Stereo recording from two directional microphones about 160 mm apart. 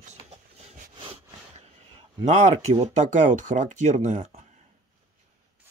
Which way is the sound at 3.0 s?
50° right (ahead or behind).